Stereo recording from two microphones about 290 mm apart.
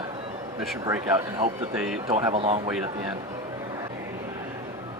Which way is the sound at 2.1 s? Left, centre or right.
Centre.